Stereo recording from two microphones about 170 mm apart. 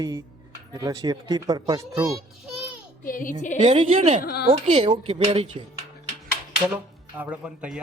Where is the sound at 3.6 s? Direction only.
30° right (ahead or behind).